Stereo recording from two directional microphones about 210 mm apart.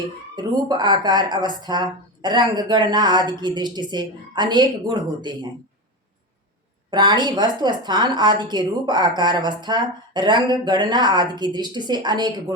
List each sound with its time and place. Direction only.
0.3 s a woman's voice: 20° right (ahead or behind)
6.9 s a woman's voice: 20° right (ahead or behind)